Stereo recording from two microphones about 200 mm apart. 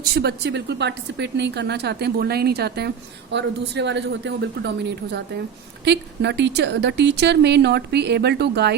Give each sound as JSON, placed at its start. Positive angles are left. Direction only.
{"t": 0.0, "sound": "speech", "side_deg": -55}